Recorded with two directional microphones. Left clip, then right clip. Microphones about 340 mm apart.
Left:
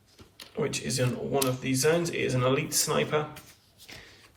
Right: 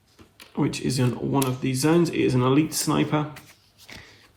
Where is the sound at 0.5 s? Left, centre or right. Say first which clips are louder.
Right 3 dB; centre.